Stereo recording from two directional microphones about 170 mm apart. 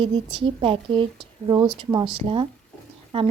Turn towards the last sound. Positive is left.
turn(degrees=-35)  # may be behind; listen again after turning